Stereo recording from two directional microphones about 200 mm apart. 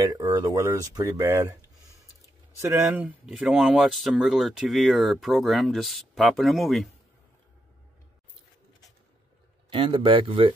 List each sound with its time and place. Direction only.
0.0 s speech: 20° right (ahead or behind)
2.6 s speech: 15° right (ahead or behind)
2.9 s speech: centre (ahead or behind)
9.7 s speech: 25° right (ahead or behind)